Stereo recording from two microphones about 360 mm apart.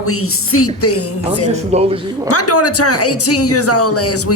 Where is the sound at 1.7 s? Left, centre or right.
Centre.